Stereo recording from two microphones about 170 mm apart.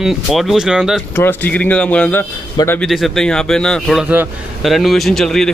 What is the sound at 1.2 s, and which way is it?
Speech, 10° left (ahead or behind).